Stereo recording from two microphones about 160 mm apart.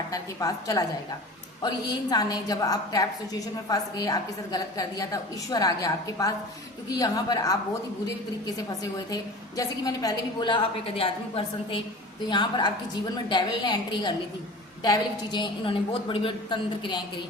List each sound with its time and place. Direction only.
0.1 s a woman's voice: 20° left (ahead or behind)
8.5 s a woman's voice: 20° left (ahead or behind)